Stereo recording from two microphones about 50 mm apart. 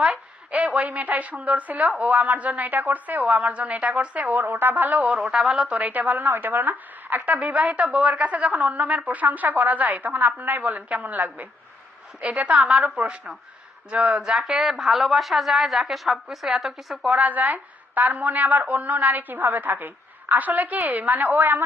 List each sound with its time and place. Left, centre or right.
0.5 s a sound: right
0.9 s a woman's voice: right
4.4 s a woman's voice: right
5.1 s a woman's voice: centre
14.2 s a woman's voice: centre
17.1 s a woman's voice: right